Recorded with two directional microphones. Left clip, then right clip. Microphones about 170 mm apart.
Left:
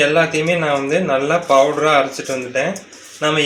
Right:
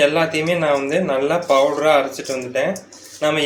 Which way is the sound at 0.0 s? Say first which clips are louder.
Left 2 dB; 30° left (ahead or behind).